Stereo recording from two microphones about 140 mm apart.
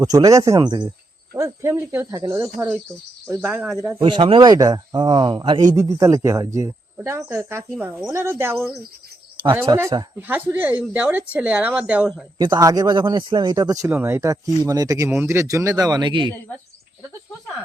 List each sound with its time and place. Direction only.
0.0 s a man's voice: 25° right (ahead or behind)
3.5 s speech: 5° right (ahead or behind)
3.8 s speech: 20° right (ahead or behind)
4.0 s speech: 40° right (ahead or behind)
5.7 s a man's voice: 20° right (ahead or behind)
12.4 s a man's voice: 30° right (ahead or behind)